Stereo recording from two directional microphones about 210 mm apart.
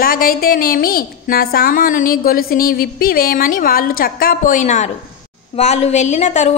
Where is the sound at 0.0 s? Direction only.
45° left (ahead or behind).